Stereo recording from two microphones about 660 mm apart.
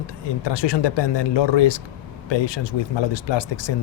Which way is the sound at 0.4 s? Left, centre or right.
Left.